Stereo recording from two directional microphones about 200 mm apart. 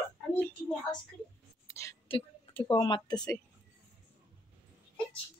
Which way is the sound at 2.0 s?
25° left (ahead or behind).